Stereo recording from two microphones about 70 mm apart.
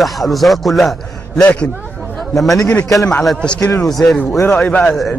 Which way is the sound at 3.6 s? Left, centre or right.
Left.